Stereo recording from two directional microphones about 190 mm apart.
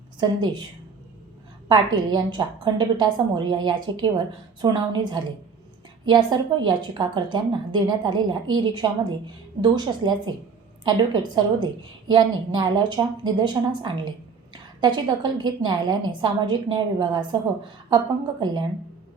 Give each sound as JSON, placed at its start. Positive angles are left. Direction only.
{"t": 1.6, "sound": "a woman's voice", "side_deg": -25}